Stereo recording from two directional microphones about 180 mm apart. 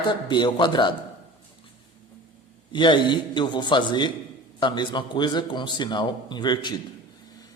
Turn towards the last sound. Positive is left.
turn(degrees=25)  # may be behind; listen again after turning